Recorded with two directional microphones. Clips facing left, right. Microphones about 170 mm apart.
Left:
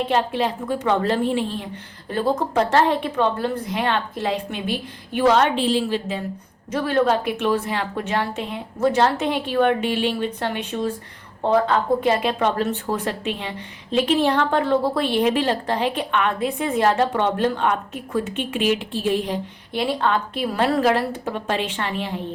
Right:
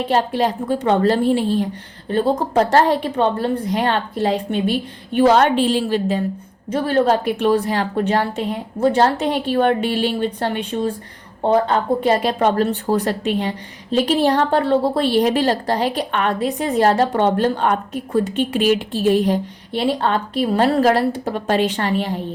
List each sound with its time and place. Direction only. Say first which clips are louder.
0.1 s speech: right 3 dB; 40° right (ahead or behind)
5.4 s a woman's voice: right 3 dB; 50° right (ahead or behind)
6.7 s speech: right 3 dB; 30° right (ahead or behind)